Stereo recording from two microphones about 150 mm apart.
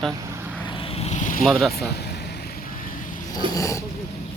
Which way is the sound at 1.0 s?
50° left (ahead or behind).